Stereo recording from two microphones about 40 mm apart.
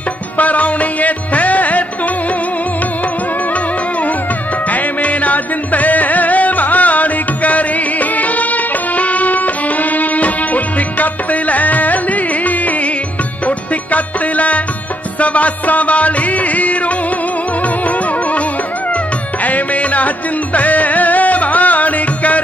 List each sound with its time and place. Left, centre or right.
0.4 s music: left
4.6 s music: left
19.4 s music: left